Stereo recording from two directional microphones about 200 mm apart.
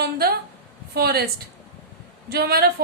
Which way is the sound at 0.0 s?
55° right (ahead or behind).